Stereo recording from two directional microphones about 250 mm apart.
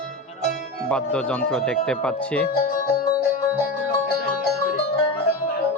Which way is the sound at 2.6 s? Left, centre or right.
Left.